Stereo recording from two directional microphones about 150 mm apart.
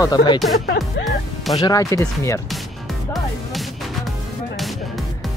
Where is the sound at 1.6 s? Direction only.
25° left (ahead or behind).